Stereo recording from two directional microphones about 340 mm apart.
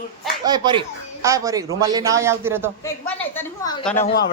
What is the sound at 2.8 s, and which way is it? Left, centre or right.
A woman's voice, centre.